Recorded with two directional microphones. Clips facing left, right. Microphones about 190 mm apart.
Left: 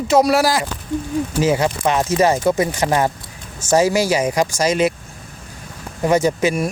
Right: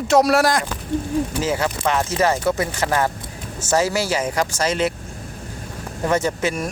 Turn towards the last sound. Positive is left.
turn(degrees=10)  # may be behind; listen again after turning